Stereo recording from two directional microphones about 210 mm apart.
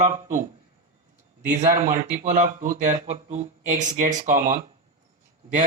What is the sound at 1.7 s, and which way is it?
Speech, 40° right (ahead or behind).